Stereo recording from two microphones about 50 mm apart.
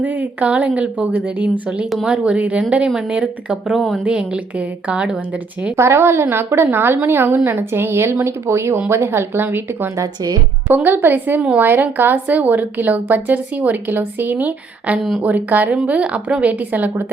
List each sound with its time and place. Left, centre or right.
0.0 s a woman's voice: right; by 1.0 s centre
1.1 s a woman's voice: right
3.5 s speech: centre
4.0 s speech: centre
5.7 s a woman's voice: right
8.1 s a woman's voice: right
15.9 s speech: right